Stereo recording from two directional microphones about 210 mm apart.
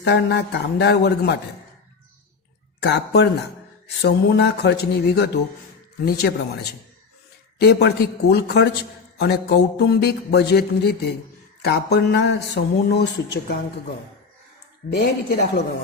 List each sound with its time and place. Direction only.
0.0 s speech: 50° left (ahead or behind)
2.8 s speech: 55° left (ahead or behind)
14.8 s speech: 50° left (ahead or behind)